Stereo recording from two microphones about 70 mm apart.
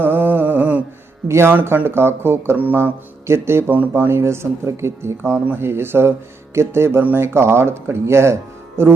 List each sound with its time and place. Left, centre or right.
0.0 s mantra: right
1.3 s speech: right